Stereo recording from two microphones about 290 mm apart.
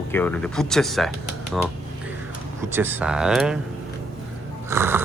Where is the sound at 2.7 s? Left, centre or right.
Centre.